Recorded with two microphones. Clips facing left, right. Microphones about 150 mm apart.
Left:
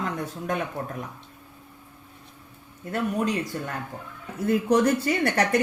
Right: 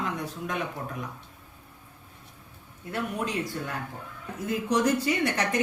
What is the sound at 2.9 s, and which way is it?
Speech, 45° left (ahead or behind).